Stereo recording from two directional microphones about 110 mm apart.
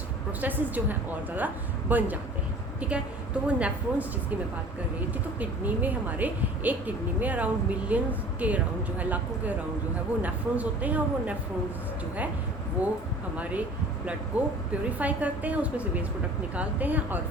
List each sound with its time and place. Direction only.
0.4 s speech: 15° right (ahead or behind)
13.3 s speech: 10° right (ahead or behind)